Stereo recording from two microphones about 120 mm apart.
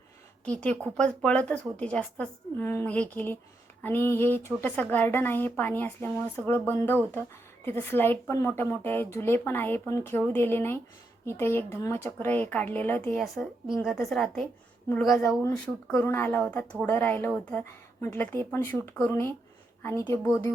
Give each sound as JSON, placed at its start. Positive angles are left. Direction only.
{"t": 0.4, "sound": "speech", "side_deg": 10}
{"t": 13.1, "sound": "speech", "side_deg": 0}
{"t": 16.0, "sound": "speech", "side_deg": 15}